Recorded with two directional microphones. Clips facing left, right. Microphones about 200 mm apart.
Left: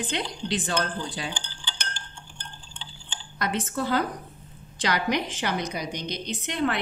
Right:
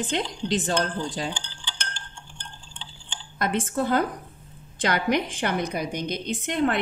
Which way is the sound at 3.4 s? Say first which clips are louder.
Right 3 dB; 50° right (ahead or behind).